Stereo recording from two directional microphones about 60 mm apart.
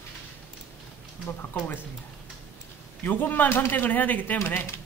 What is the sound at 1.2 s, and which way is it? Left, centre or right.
Speech, left.